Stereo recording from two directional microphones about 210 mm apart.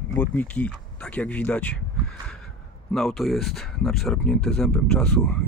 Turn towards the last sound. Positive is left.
turn(degrees=5)  # may be behind; listen again after turning